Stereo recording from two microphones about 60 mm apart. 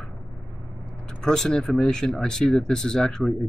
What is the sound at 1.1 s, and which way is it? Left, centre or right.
Speech, centre.